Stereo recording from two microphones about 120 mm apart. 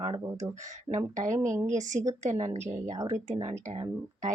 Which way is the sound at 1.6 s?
90° right.